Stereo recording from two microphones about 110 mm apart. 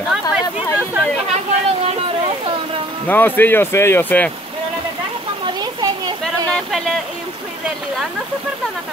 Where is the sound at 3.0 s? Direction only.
15° left (ahead or behind).